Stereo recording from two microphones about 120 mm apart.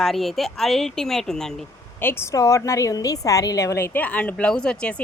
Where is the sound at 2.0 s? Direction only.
20° left (ahead or behind).